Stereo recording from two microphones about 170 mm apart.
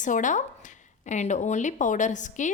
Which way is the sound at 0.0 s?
50° left (ahead or behind).